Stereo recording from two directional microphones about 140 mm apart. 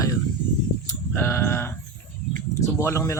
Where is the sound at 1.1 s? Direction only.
20° left (ahead or behind).